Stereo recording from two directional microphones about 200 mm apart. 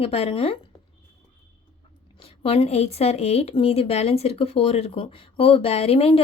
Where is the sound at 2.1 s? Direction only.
30° left (ahead or behind).